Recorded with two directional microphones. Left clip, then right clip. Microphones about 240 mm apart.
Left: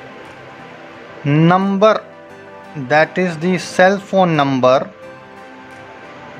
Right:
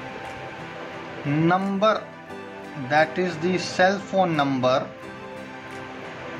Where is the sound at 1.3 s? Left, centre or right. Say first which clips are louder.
Left 8 dB; left.